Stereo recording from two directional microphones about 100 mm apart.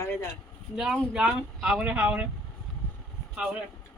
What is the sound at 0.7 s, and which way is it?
A woman's voice, 5° right (ahead or behind).